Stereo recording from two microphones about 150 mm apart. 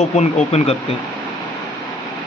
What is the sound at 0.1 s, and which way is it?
Speech, 45° left (ahead or behind).